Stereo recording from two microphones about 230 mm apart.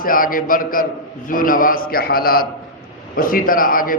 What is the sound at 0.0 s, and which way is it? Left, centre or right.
A man's voice, left.